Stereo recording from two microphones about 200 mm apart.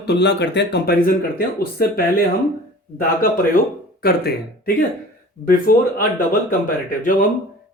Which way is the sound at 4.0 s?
50° left (ahead or behind).